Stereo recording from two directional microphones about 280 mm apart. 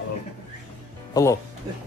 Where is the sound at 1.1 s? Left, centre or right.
Centre.